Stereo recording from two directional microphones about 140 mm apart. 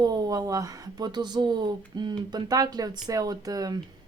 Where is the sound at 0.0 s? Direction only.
30° right (ahead or behind).